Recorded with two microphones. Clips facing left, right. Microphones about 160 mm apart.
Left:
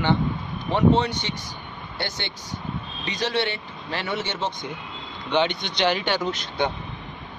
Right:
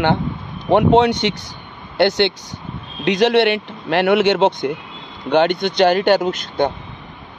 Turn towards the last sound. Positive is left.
turn(degrees=-50)  # may be behind; listen again after turning